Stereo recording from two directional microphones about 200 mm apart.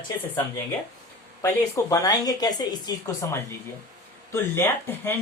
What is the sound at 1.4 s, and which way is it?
Speech, 15° left (ahead or behind).